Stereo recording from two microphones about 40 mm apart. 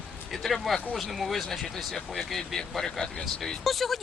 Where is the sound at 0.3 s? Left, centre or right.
Centre.